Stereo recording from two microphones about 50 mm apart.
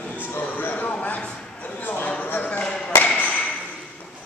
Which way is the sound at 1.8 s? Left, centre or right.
Left.